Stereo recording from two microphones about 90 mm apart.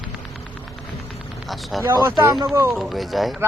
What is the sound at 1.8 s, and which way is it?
Speech, 30° right (ahead or behind).